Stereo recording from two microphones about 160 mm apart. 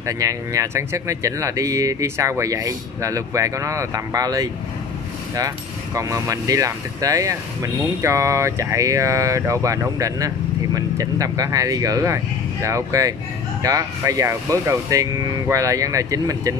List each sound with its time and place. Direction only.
0.0 s speech: 20° right (ahead or behind)
5.9 s speech: 20° right (ahead or behind)